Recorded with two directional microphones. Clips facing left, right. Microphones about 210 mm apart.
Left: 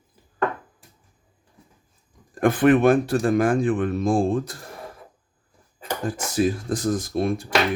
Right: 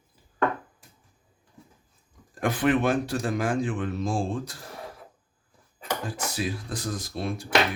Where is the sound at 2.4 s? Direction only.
55° left (ahead or behind).